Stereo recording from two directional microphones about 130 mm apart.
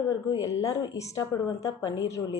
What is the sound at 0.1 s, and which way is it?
A woman's voice, 30° left (ahead or behind).